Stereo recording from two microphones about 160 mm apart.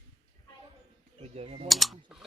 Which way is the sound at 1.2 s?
40° right (ahead or behind).